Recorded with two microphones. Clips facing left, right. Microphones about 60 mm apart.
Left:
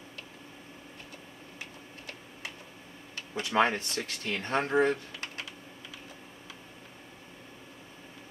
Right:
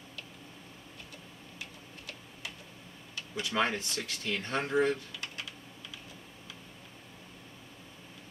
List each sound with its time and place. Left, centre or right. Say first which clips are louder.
1.6 s tick-tock: left 1 dB; left
3.2 s speech: left 5 dB; left